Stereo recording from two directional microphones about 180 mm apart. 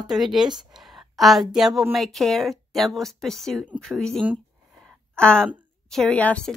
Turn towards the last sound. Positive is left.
turn(degrees=5)  # may be behind; listen again after turning